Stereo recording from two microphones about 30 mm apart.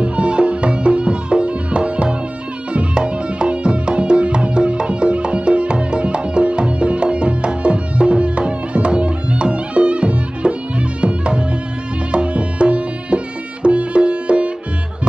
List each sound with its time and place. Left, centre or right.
0.0 s music: right